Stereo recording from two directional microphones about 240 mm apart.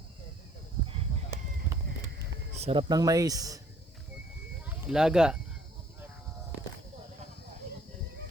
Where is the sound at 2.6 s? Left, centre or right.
Right.